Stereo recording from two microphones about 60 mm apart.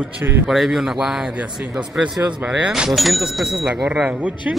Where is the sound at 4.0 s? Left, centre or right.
Centre.